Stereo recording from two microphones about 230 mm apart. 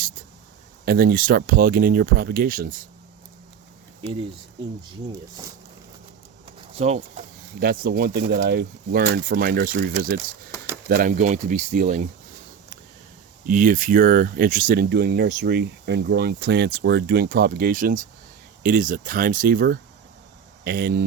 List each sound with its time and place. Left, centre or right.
0.9 s speech: right
6.7 s speech: right
7.6 s speech: right
13.5 s speech: right